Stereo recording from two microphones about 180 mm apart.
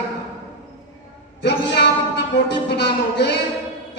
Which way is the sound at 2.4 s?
70° left (ahead or behind).